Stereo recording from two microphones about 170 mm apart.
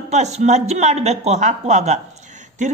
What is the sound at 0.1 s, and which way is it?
A man's voice, 40° right (ahead or behind).